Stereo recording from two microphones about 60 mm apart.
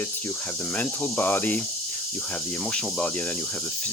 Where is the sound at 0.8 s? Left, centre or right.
Left.